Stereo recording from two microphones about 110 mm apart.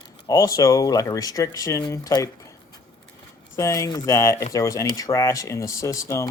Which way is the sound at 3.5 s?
30° left (ahead or behind).